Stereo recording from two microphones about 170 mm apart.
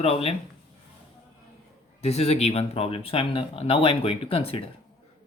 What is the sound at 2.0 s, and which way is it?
Speech, 40° left (ahead or behind).